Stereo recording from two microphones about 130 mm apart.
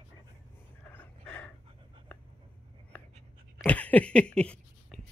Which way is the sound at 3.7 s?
10° left (ahead or behind).